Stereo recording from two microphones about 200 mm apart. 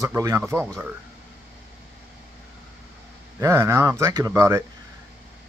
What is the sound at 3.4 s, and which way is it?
Speech, 15° right (ahead or behind).